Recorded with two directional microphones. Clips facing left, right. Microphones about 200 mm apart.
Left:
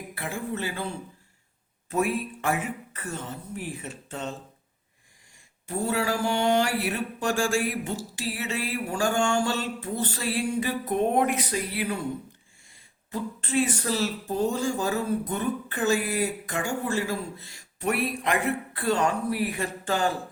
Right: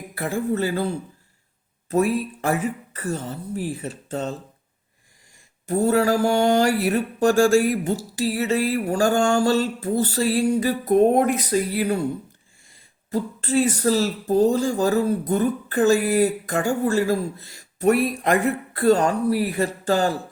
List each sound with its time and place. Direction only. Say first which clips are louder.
0.1 s speech: right 9 dB; 40° right (ahead or behind)
5.6 s speech: right 8 dB; 40° right (ahead or behind)
13.1 s speech: right 7 dB; 40° right (ahead or behind)